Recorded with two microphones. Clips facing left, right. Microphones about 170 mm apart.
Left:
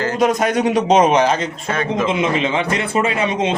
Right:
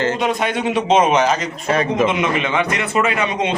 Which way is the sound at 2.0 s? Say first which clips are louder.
Left 1 dB; 30° left (ahead or behind).